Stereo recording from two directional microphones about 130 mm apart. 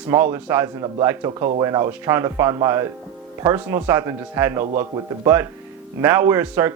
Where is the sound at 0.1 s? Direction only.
20° right (ahead or behind).